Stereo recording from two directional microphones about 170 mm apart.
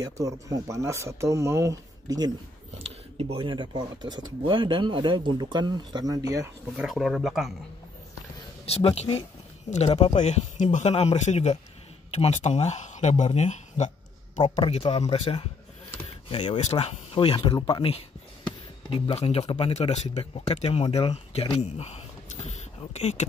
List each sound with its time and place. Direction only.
0.0 s speech: 20° right (ahead or behind)
2.8 s speech: 35° right (ahead or behind)
6.8 s speech: centre (ahead or behind)
8.6 s speech: 35° left (ahead or behind)